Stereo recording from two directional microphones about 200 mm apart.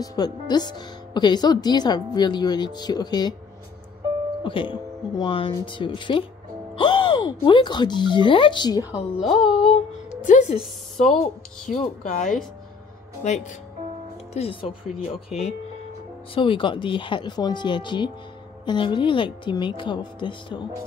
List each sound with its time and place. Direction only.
0.0 s speech: 20° left (ahead or behind)
4.4 s speech: 25° left (ahead or behind)
8.9 s speech: centre (ahead or behind)
10.2 s speech: 35° left (ahead or behind)
10.6 s speech: centre (ahead or behind)
11.8 s speech: 40° left (ahead or behind)
16.3 s speech: 25° left (ahead or behind)